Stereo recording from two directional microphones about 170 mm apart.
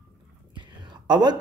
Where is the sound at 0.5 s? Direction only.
25° right (ahead or behind).